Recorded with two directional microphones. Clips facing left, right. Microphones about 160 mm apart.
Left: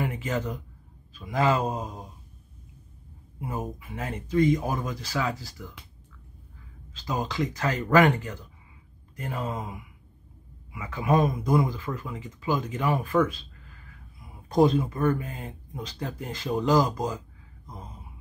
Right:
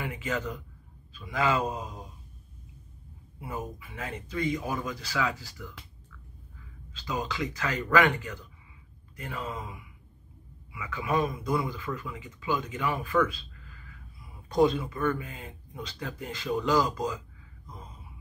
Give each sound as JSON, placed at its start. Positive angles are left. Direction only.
{"t": 0.0, "sound": "speech", "side_deg": 40}
{"t": 3.3, "sound": "speech", "side_deg": 40}
{"t": 7.0, "sound": "speech", "side_deg": 40}
{"t": 10.7, "sound": "speech", "side_deg": 40}
{"t": 14.5, "sound": "speech", "side_deg": 45}